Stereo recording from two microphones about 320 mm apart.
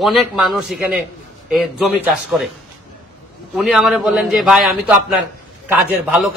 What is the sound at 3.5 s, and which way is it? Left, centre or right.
A man's voice, centre.